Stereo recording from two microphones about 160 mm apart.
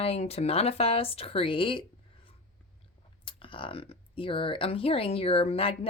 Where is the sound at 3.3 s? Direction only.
35° left (ahead or behind).